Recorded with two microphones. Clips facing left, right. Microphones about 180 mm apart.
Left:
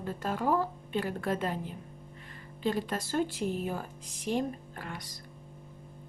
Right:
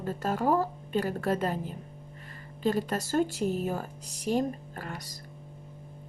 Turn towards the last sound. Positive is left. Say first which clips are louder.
# right 2 dB
turn(degrees=-45)  # may be behind; listen again after turning